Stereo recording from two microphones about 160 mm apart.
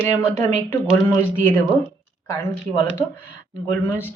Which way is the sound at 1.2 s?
15° left (ahead or behind).